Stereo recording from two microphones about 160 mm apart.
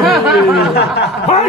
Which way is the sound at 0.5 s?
90° left.